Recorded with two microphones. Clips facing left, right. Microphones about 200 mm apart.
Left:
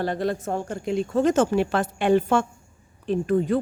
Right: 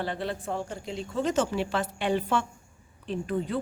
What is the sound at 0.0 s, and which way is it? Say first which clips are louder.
A woman's voice: left 6 dB; 45° left (ahead or behind).